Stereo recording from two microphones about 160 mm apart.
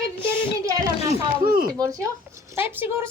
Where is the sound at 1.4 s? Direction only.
60° right (ahead or behind).